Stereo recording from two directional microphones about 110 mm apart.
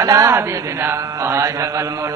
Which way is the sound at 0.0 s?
30° right (ahead or behind).